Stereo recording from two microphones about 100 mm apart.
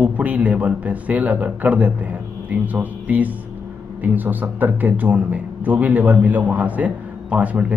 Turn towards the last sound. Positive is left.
turn(degrees=-15)  # may be behind; listen again after turning